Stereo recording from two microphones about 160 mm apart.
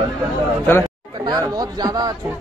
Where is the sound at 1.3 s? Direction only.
25° right (ahead or behind).